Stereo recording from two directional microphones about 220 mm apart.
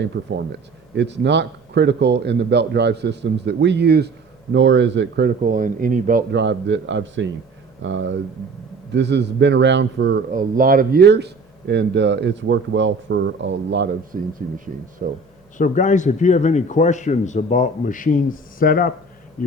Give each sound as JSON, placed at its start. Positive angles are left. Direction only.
{"t": 0.0, "sound": "speech", "side_deg": -50}
{"t": 6.3, "sound": "speech", "side_deg": -55}
{"t": 10.3, "sound": "speech", "side_deg": -40}
{"t": 14.1, "sound": "speech", "side_deg": -40}
{"t": 15.5, "sound": "speech", "side_deg": 35}
{"t": 19.4, "sound": "bee", "side_deg": 40}